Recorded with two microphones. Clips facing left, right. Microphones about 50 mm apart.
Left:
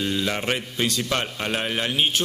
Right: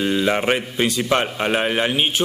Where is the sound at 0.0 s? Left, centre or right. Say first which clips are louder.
Right 6 dB; centre.